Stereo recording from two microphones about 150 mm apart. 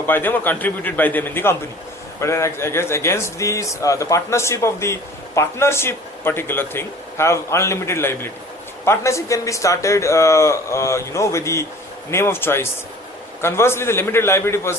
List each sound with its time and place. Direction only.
0.1 s a man's voice: 15° left (ahead or behind)